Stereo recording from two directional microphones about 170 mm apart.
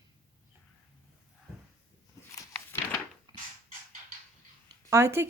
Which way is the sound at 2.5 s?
10° left (ahead or behind).